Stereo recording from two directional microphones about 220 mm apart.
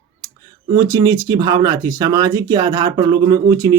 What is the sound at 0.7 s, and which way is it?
Speech, 15° right (ahead or behind).